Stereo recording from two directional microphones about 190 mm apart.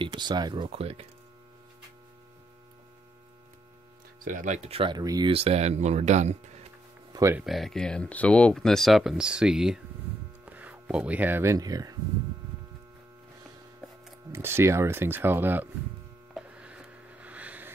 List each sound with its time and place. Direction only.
0.0 s speech: 25° right (ahead or behind)
4.2 s speech: 45° right (ahead or behind)
7.1 s speech: 15° right (ahead or behind)
7.4 s speech: centre (ahead or behind); by 12.0 s 20° right (ahead or behind)
14.3 s speech: 15° right (ahead or behind)
16.3 s a sound: 5° right (ahead or behind)